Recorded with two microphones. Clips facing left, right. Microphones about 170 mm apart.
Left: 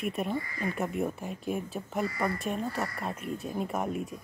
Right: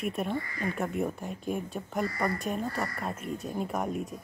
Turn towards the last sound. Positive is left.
turn(degrees=0)  # may be behind; listen again after turning